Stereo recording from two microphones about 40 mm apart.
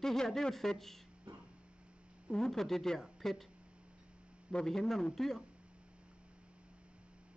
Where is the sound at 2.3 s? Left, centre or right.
Centre.